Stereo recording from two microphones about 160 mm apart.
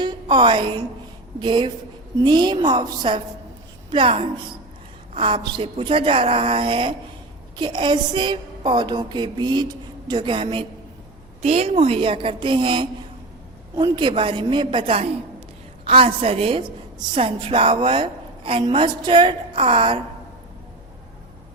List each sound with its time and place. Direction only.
0.0 s a woman's voice: 30° right (ahead or behind)